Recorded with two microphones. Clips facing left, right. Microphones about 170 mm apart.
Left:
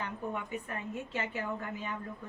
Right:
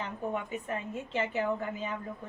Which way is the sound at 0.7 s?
20° right (ahead or behind).